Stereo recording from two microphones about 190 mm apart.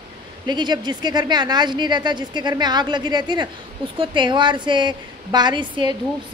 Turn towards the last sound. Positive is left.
turn(degrees=-25)  # may be behind; listen again after turning